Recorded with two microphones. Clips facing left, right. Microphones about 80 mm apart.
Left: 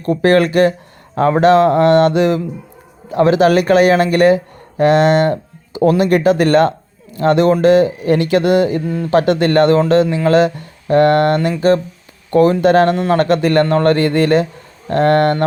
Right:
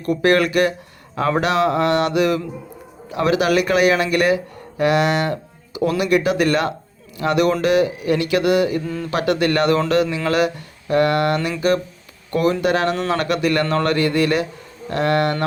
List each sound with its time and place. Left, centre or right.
0.0 s speech: left
11.3 s speech: left
12.9 s speech: left